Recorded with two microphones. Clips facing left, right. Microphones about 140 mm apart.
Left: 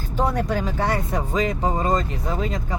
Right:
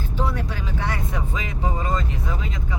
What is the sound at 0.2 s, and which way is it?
Speech, 45° left (ahead or behind).